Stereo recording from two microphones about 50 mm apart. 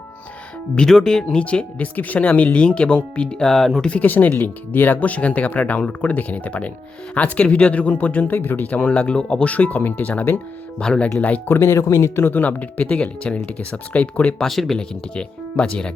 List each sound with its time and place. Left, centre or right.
0.9 s speech: centre
4.0 s speech: left; by 9.5 s centre
9.5 s speech: left
10.8 s speech: centre
11.4 s speech: left
12.2 s speech: left
14.4 s speech: centre
14.8 s speech: centre